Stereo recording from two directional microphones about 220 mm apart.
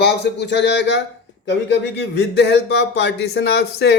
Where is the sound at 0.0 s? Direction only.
50° left (ahead or behind).